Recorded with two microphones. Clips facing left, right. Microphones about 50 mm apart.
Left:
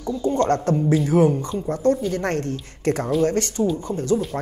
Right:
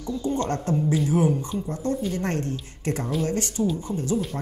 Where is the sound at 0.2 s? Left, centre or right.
Left.